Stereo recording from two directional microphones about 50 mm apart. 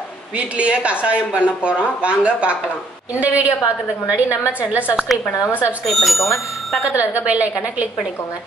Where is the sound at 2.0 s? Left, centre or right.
Right.